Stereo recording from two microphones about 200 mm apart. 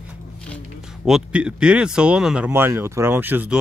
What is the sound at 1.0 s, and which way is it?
Speech, 5° right (ahead or behind).